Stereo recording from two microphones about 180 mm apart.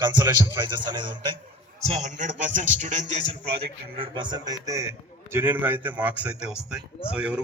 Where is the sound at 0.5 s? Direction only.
25° right (ahead or behind).